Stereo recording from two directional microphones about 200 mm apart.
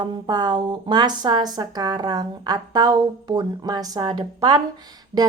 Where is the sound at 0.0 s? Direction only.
20° right (ahead or behind).